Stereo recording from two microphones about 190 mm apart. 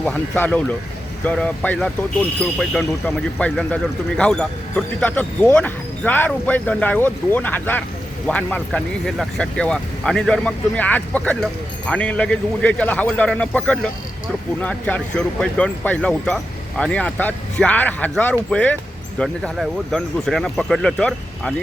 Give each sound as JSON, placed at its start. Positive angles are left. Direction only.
{"t": 0.0, "sound": "speech", "side_deg": 5}